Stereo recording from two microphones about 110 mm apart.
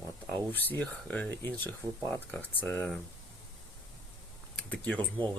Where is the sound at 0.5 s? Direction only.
15° left (ahead or behind).